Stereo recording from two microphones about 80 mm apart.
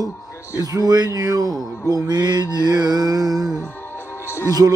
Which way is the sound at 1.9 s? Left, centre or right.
Right.